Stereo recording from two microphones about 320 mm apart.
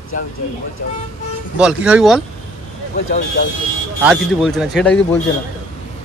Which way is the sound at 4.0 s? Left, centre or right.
Centre.